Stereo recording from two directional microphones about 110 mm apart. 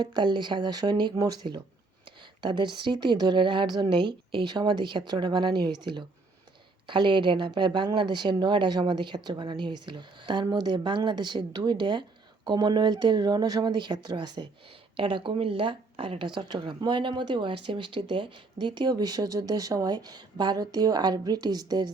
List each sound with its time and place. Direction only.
0.0 s a woman's voice: 40° right (ahead or behind)